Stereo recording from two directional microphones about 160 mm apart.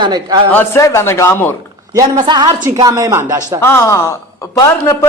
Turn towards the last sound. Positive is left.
turn(degrees=20)  # may be behind; listen again after turning